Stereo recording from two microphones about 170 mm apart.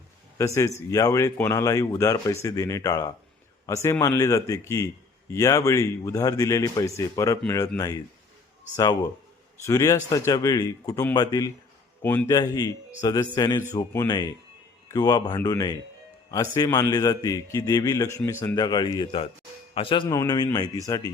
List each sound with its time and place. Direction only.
0.3 s a man's voice: 15° left (ahead or behind)
8.7 s a man's voice: 20° left (ahead or behind)
12.4 s a man's voice: 20° left (ahead or behind)